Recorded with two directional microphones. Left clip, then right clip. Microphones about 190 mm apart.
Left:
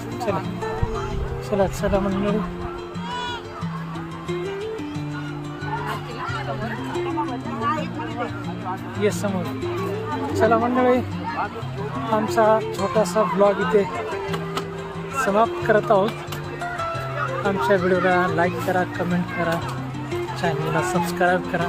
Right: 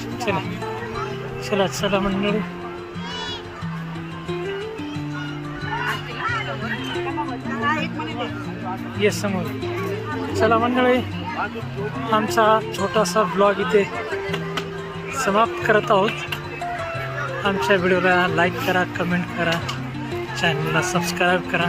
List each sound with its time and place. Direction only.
1.5 s speech: centre (ahead or behind)
7.6 s a sound: 25° right (ahead or behind)
9.0 s a man's voice: 10° right (ahead or behind)
10.3 s a man's voice: 15° right (ahead or behind)
12.1 s a man's voice: 10° right (ahead or behind)
15.2 s speech: 10° right (ahead or behind)
17.4 s a man's voice: 10° right (ahead or behind)